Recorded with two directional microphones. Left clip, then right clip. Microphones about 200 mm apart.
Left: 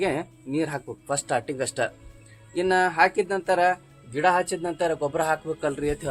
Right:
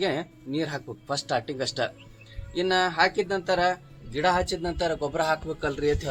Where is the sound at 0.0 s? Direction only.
20° left (ahead or behind).